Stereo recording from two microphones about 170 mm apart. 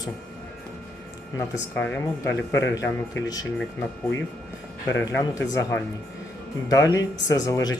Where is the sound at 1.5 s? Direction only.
10° left (ahead or behind).